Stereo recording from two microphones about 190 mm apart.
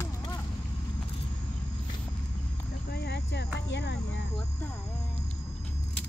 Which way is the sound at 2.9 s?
60° left (ahead or behind).